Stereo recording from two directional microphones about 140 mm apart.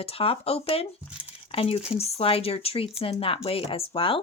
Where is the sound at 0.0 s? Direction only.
45° left (ahead or behind).